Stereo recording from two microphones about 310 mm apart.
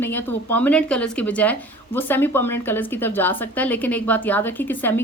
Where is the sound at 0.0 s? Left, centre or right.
Centre.